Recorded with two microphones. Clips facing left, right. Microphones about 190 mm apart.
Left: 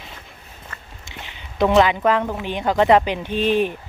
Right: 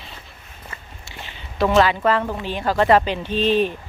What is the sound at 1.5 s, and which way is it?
Speech, 15° left (ahead or behind).